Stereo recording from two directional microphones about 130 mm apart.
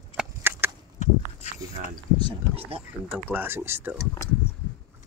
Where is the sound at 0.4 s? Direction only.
15° right (ahead or behind).